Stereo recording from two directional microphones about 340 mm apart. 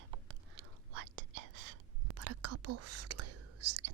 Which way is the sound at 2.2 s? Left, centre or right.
Right.